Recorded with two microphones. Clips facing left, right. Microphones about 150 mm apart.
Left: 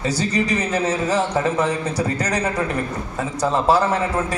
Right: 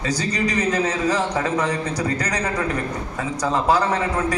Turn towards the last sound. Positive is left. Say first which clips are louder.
# left 1 dB
turn(degrees=25)  # may be behind; listen again after turning